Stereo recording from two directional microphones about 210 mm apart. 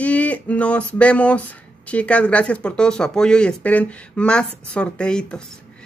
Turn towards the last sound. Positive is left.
turn(degrees=5)  # may be behind; listen again after turning